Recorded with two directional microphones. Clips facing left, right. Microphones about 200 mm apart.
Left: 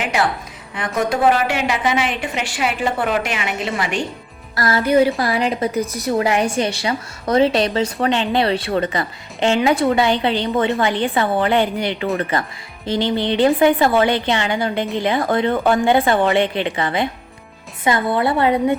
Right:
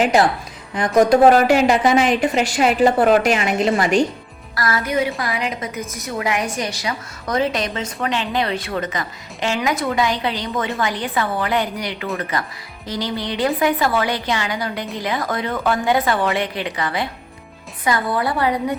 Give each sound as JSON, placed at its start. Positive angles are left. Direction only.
{"t": 0.0, "sound": "a woman's voice", "side_deg": -40}
{"t": 4.5, "sound": "a woman's voice", "side_deg": 30}